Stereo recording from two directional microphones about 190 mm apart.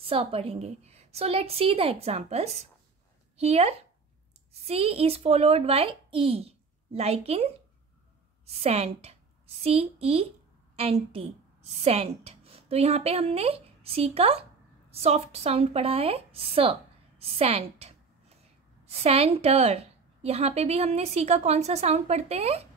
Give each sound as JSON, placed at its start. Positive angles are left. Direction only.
{"t": 0.0, "sound": "a woman's voice", "side_deg": -30}
{"t": 8.5, "sound": "a woman's voice", "side_deg": -35}
{"t": 17.2, "sound": "a sound", "side_deg": -30}
{"t": 18.9, "sound": "a woman's voice", "side_deg": -30}